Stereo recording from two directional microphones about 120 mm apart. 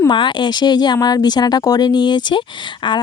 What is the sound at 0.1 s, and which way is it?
Speech, 40° left (ahead or behind).